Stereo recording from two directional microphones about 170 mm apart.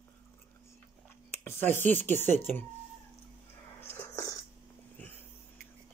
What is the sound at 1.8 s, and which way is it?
Speech, 10° left (ahead or behind).